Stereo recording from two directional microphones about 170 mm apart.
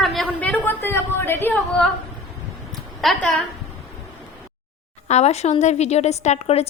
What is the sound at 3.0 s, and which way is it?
Speech, centre (ahead or behind).